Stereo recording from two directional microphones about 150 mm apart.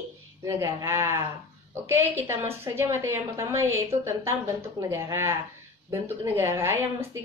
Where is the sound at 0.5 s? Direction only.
15° right (ahead or behind).